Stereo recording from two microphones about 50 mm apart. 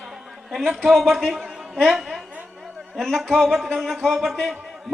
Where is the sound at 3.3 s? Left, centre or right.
Centre.